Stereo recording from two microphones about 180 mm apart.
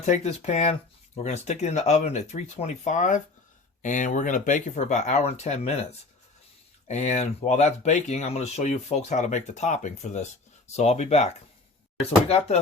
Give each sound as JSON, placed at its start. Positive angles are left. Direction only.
{"t": 0.0, "sound": "speech", "side_deg": 40}
{"t": 6.8, "sound": "speech", "side_deg": 40}